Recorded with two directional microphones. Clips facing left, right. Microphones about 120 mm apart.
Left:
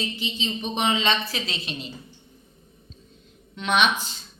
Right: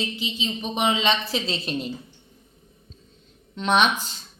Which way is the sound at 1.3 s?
25° right (ahead or behind).